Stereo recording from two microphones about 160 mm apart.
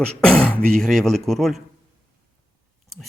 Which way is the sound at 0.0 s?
5° left (ahead or behind).